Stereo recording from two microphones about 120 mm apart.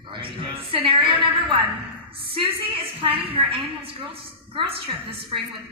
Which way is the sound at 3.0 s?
50° right (ahead or behind).